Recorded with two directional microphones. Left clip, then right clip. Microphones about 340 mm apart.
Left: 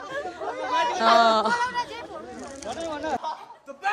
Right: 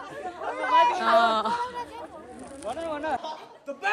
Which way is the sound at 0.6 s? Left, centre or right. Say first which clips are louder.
Right 5 dB; right.